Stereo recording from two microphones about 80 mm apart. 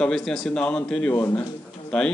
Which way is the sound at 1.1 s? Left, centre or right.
Left.